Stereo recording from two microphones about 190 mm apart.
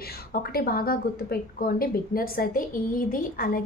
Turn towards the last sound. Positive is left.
turn(degrees=45)  # may be behind; listen again after turning